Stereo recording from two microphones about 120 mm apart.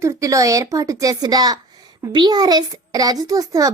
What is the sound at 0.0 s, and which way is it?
A woman's voice, 25° right (ahead or behind).